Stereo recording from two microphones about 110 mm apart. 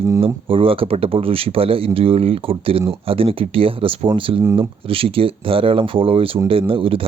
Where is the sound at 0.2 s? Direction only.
55° right (ahead or behind).